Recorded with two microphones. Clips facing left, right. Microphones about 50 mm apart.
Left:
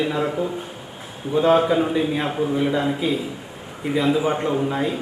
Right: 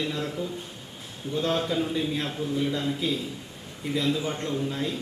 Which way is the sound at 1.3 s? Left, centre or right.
Left.